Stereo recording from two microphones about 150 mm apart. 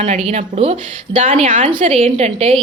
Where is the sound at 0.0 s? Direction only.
50° right (ahead or behind).